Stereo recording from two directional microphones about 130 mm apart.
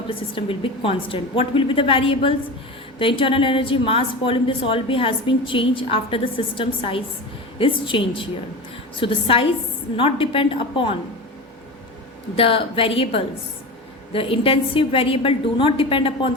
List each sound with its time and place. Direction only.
0.1 s a woman's voice: 40° left (ahead or behind)
12.4 s a woman's voice: 45° left (ahead or behind)